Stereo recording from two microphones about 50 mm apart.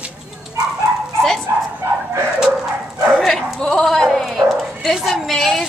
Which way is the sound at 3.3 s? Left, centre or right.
Centre.